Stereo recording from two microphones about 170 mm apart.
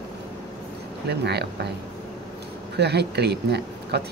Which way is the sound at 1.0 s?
80° right.